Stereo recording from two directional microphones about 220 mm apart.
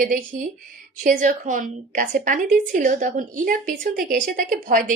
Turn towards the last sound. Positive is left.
turn(degrees=-40)  # may be behind; listen again after turning